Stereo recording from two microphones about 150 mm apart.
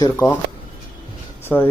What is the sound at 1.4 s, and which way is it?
Speech, 15° left (ahead or behind).